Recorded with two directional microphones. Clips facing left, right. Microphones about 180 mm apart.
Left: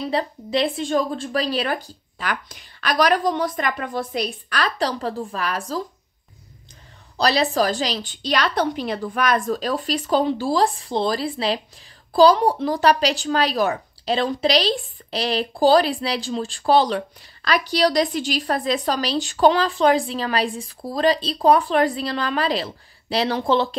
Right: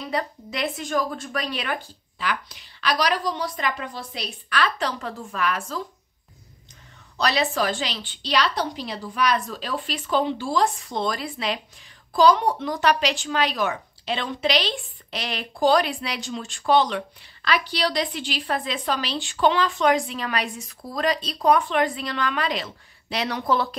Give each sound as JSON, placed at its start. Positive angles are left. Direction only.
{"t": 0.0, "sound": "speech", "side_deg": 30}
{"t": 7.2, "sound": "speech", "side_deg": 35}